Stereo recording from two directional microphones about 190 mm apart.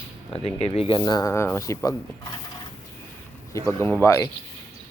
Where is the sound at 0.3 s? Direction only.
35° left (ahead or behind); by 2.0 s 15° left (ahead or behind).